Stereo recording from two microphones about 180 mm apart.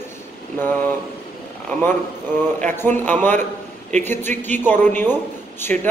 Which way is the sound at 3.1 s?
10° left (ahead or behind).